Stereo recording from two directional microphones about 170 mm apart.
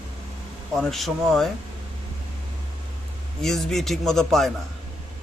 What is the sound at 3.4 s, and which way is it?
Speech, centre (ahead or behind).